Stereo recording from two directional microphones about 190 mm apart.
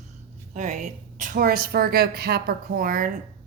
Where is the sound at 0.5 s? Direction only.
40° right (ahead or behind).